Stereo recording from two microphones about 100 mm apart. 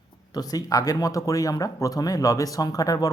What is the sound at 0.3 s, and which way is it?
Speech, 40° left (ahead or behind).